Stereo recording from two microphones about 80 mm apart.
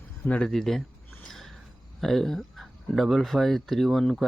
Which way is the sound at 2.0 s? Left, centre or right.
Centre.